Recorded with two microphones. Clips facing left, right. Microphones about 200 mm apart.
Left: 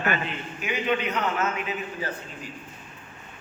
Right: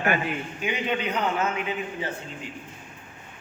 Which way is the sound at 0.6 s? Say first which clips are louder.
Left 2 dB; 30° right (ahead or behind).